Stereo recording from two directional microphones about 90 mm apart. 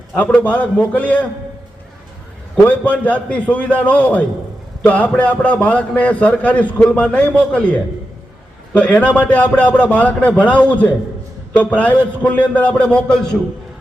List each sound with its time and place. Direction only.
0.1 s a man's voice: 10° left (ahead or behind)
2.6 s a man's voice: 15° left (ahead or behind)